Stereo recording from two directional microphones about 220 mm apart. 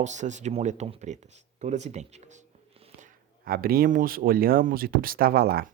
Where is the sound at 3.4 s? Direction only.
40° right (ahead or behind).